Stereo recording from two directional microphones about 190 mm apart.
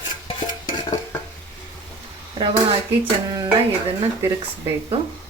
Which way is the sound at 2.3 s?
25° right (ahead or behind).